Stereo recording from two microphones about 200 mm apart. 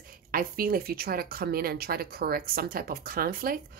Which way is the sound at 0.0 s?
45° right (ahead or behind).